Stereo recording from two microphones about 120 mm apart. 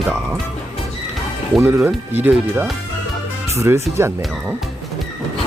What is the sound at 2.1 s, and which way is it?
Speech, 15° right (ahead or behind).